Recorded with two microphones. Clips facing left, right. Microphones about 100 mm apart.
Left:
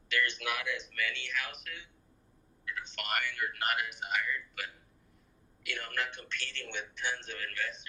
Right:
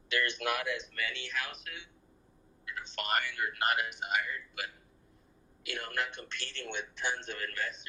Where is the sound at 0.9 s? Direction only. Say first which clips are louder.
Left 1 dB; 35° right (ahead or behind).